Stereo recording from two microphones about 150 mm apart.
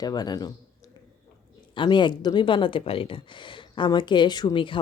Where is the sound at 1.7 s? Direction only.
30° left (ahead or behind).